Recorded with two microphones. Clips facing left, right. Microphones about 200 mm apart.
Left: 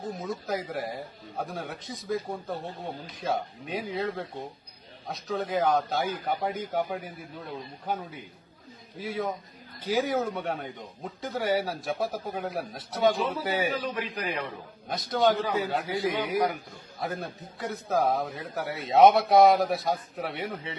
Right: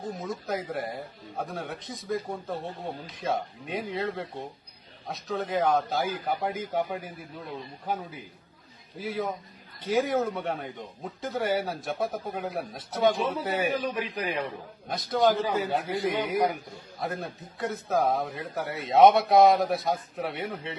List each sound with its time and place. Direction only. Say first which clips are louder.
0.2 s a man's voice: left 1 dB; centre (ahead or behind)
13.7 s a man's voice: right 2 dB; 20° right (ahead or behind)
14.8 s a man's voice: right 1 dB; centre (ahead or behind)